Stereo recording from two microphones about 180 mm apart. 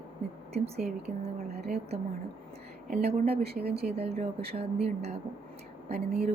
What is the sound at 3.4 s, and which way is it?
Speech, 60° right (ahead or behind).